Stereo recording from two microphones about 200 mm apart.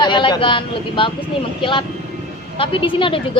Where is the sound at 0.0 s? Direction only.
25° left (ahead or behind).